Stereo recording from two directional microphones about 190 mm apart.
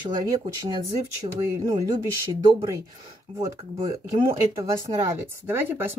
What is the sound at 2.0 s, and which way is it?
Speech, 20° right (ahead or behind).